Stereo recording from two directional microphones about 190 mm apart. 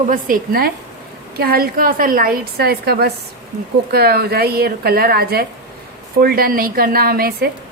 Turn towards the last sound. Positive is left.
turn(degrees=-50)  # may be behind; listen again after turning